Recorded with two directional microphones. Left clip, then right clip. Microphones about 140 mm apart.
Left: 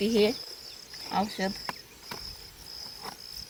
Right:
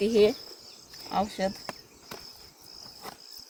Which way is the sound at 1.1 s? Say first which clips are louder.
Right 1 dB; 35° right (ahead or behind).